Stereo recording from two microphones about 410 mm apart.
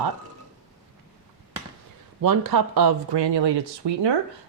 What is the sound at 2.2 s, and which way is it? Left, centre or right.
Speech, right.